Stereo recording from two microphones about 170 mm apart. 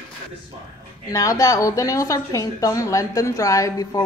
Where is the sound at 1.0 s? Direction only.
20° left (ahead or behind).